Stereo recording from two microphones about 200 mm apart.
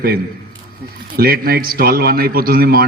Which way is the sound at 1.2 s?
50° right (ahead or behind).